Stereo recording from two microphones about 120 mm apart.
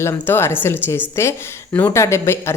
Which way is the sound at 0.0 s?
20° left (ahead or behind).